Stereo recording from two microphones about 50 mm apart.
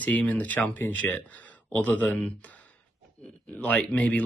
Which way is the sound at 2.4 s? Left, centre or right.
Left.